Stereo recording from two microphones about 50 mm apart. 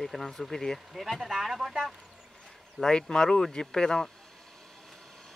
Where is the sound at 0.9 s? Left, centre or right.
Centre.